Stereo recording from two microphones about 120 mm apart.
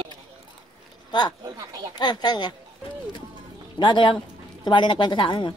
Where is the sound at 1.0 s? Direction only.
35° left (ahead or behind).